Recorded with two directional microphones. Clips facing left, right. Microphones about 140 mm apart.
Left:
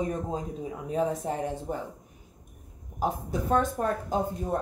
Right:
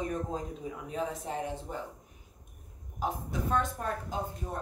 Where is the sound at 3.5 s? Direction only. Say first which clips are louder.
Left 7 dB; 40° left (ahead or behind).